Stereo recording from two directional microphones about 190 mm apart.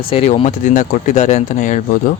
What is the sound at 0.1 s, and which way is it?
Speech, 30° left (ahead or behind).